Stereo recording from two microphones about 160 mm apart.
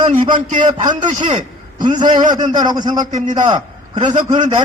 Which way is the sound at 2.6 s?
25° right (ahead or behind).